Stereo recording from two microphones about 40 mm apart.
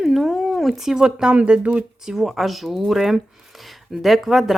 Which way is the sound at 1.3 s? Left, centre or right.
Right.